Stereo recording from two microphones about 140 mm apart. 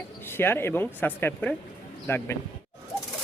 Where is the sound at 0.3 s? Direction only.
15° left (ahead or behind).